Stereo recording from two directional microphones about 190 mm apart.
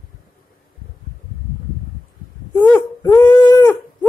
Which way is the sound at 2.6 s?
20° left (ahead or behind).